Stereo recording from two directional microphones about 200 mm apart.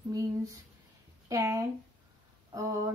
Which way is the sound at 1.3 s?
15° right (ahead or behind).